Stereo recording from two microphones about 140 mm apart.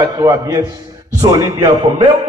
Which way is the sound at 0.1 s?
25° right (ahead or behind).